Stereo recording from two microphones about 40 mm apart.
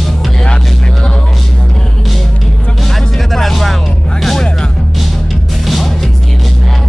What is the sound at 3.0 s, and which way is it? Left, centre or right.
Music, centre.